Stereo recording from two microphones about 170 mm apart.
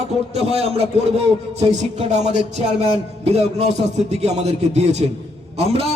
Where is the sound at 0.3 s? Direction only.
35° right (ahead or behind).